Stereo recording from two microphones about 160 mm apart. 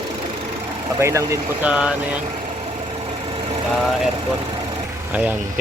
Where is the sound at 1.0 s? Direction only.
20° right (ahead or behind).